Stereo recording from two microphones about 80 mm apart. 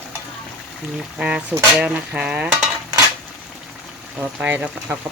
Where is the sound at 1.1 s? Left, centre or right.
Centre.